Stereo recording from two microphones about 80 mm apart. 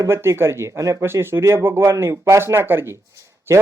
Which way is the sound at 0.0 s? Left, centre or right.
Right.